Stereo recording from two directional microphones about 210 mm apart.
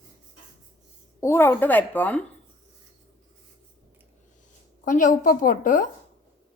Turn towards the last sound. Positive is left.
turn(degrees=40)  # may be behind; listen again after turning